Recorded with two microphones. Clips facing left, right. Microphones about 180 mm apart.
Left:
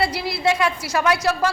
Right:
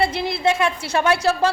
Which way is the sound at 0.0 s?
25° right (ahead or behind).